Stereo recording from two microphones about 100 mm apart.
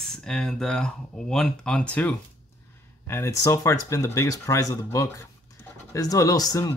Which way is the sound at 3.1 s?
30° left (ahead or behind).